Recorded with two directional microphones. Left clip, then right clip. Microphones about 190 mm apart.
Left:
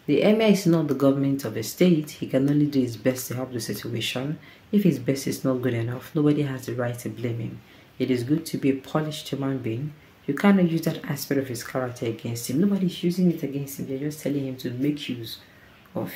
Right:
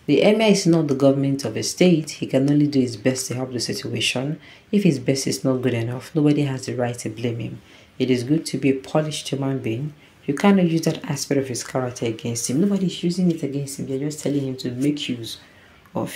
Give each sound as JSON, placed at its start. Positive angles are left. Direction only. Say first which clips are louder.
{"t": 0.0, "sound": "speech", "louder": "right 4 dB", "side_deg": -15}